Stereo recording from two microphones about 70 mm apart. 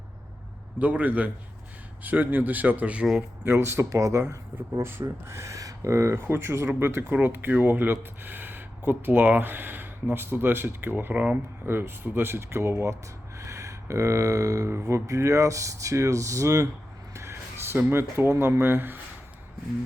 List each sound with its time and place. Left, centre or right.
0.8 s speech: right
3.5 s speech: right
6.2 s speech: right
13.4 s a sound: right
14.7 s speech: right
17.2 s a sound: right
17.9 s speech: right